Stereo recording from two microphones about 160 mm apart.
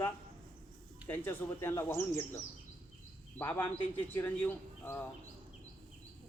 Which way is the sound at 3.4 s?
10° left (ahead or behind).